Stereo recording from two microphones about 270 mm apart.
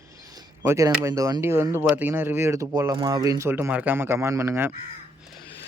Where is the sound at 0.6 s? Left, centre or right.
Centre.